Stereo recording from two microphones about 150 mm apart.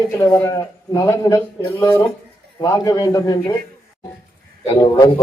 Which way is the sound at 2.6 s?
25° left (ahead or behind).